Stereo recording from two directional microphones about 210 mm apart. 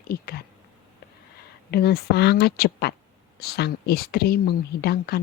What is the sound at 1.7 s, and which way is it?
A woman's voice, 50° left (ahead or behind).